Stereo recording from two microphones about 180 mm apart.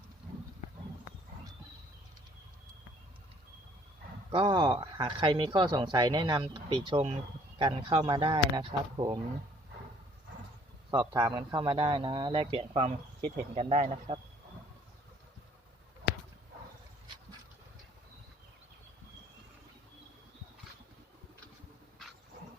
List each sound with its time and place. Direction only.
4.3 s speech: 25° right (ahead or behind)
10.9 s speech: 20° right (ahead or behind); by 14.2 s 40° right (ahead or behind)